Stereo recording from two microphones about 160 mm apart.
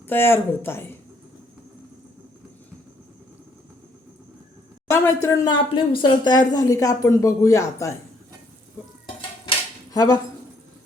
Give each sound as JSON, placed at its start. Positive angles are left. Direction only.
{"t": 0.1, "sound": "speech", "side_deg": 15}
{"t": 4.9, "sound": "speech", "side_deg": 20}
{"t": 9.9, "sound": "speech", "side_deg": 25}